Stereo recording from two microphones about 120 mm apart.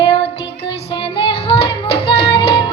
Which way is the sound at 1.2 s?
50° left (ahead or behind).